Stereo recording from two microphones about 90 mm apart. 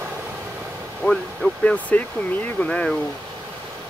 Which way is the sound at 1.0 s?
10° left (ahead or behind).